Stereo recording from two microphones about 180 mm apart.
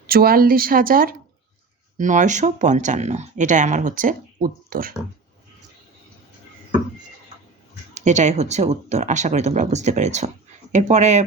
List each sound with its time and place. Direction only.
0.1 s speech: 55° right (ahead or behind)
7.9 s speech: 40° right (ahead or behind)